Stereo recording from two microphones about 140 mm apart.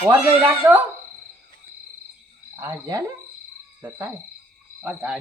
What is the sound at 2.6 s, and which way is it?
Frog, 20° right (ahead or behind).